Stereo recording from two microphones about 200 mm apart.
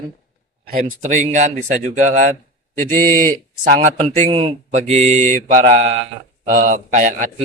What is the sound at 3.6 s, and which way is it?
Speech, 35° right (ahead or behind).